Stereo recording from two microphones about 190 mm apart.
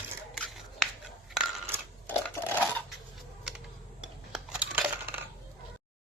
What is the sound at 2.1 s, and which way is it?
Crushing, 10° left (ahead or behind).